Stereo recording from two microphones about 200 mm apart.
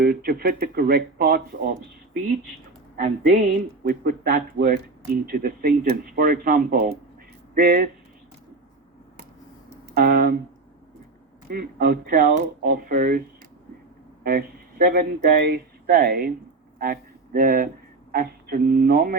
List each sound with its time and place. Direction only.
0.0 s speech: 50° right (ahead or behind)
2.9 s speech: 45° right (ahead or behind)
9.9 s speech: 50° right (ahead or behind)
11.4 s speech: 50° right (ahead or behind)
14.3 s speech: 50° right (ahead or behind)
16.7 s a sound: 45° right (ahead or behind)
18.1 s speech: 50° right (ahead or behind)